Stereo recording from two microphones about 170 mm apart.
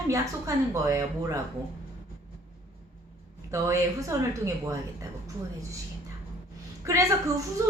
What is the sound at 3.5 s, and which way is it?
Speech, 20° right (ahead or behind).